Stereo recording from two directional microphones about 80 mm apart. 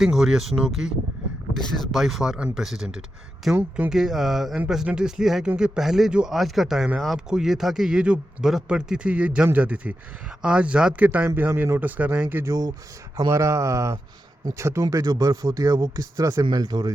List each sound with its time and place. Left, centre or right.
0.0 s speech: centre
1.5 s speech: centre
3.5 s speech: centre
3.8 s speech: centre; by 12.5 s right
12.5 s speech: right